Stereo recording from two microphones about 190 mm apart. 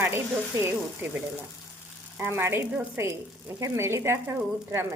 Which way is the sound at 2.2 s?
10° right (ahead or behind).